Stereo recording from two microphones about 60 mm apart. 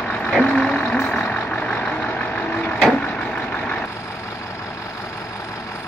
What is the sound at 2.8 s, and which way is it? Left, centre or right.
Vehicle, centre.